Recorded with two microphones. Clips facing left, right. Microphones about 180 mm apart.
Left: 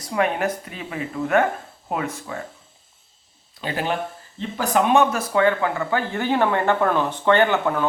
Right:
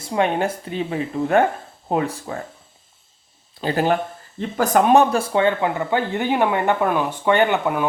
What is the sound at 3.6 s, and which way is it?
Speech, 40° right (ahead or behind).